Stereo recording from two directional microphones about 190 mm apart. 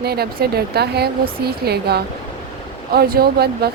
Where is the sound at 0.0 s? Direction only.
55° right (ahead or behind).